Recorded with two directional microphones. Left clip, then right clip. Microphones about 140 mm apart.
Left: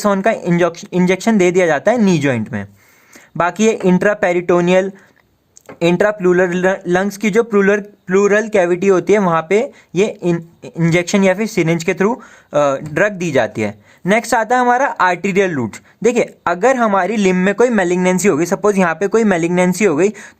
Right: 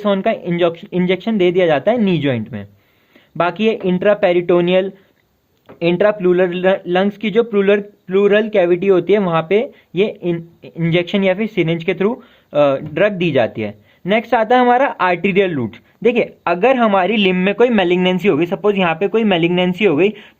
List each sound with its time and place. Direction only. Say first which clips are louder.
0.0 s speech: left 2 dB; 30° left (ahead or behind)
17.1 s speech: even; 15° left (ahead or behind)
17.7 s speech: even; 25° left (ahead or behind)